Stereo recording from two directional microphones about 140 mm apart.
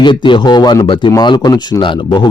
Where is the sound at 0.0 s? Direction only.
35° left (ahead or behind).